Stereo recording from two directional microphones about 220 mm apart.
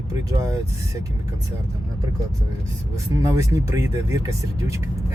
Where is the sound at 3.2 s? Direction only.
15° right (ahead or behind).